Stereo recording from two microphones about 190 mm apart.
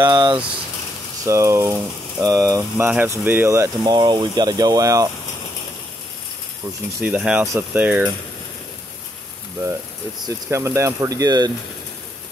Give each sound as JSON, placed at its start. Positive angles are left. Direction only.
{"t": 0.0, "sound": "speech", "side_deg": -20}
{"t": 7.0, "sound": "speech", "side_deg": -5}
{"t": 10.2, "sound": "speech", "side_deg": -15}